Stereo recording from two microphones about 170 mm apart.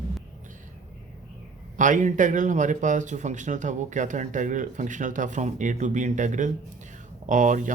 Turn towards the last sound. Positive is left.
turn(degrees=-50)  # may be behind; listen again after turning